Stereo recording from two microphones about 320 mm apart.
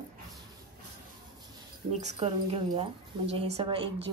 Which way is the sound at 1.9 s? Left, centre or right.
Right.